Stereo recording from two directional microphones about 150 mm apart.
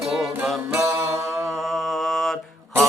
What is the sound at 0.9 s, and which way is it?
Music, 20° right (ahead or behind).